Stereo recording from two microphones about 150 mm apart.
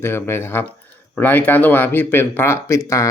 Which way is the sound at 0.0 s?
15° left (ahead or behind).